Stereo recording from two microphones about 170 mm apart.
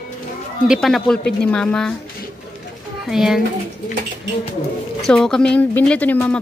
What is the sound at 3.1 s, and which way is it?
Speech, 5° right (ahead or behind).